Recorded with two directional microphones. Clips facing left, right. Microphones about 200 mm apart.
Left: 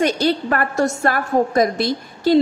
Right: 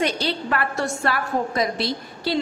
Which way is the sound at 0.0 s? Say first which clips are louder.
Left 6 dB; 45° left (ahead or behind).